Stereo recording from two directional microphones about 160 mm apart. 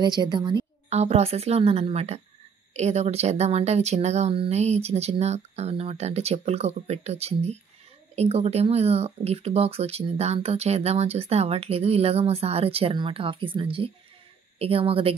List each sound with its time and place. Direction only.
0.0 s a woman's voice: 25° right (ahead or behind)
0.8 s speech: 45° right (ahead or behind)